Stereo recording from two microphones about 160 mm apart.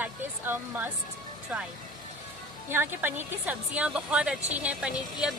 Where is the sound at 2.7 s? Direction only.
15° right (ahead or behind).